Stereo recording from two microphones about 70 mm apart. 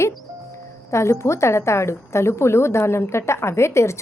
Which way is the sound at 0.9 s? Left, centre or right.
Left.